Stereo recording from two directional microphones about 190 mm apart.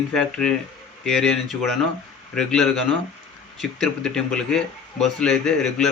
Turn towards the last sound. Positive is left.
turn(degrees=5)  # may be behind; listen again after turning